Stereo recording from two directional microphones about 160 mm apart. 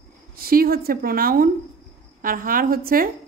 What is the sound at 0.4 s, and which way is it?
A woman's voice, 65° right (ahead or behind).